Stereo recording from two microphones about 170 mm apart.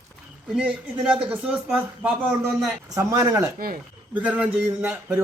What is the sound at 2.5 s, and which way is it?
Speech, 20° right (ahead or behind).